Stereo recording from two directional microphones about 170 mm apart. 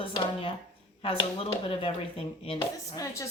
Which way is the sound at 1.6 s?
35° left (ahead or behind).